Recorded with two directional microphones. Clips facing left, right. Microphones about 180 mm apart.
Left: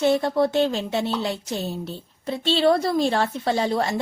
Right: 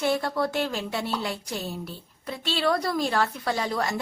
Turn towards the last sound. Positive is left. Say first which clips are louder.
# left 5 dB
turn(degrees=25)  # may be behind; listen again after turning